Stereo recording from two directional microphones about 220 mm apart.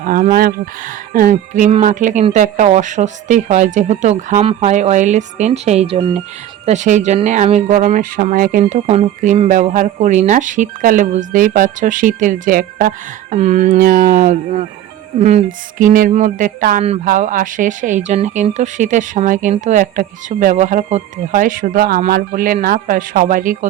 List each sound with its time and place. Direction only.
0.0 s speech: 40° right (ahead or behind)